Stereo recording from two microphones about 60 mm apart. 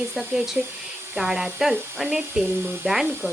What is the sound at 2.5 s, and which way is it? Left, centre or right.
Speech, right.